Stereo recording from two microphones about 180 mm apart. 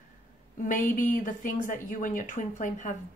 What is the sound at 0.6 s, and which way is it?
A woman's voice, 45° left (ahead or behind).